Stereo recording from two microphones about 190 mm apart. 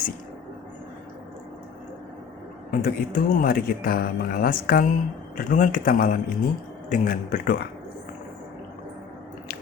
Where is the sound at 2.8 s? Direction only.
45° left (ahead or behind).